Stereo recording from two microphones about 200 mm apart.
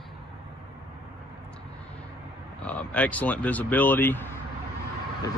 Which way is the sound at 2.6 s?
5° left (ahead or behind).